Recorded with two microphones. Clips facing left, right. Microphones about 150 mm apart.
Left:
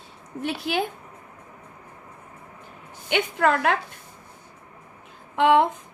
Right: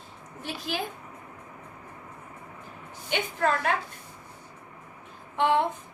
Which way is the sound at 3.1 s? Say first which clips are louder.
Left 5 dB; 65° left (ahead or behind).